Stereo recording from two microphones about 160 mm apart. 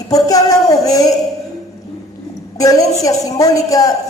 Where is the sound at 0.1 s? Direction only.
20° left (ahead or behind).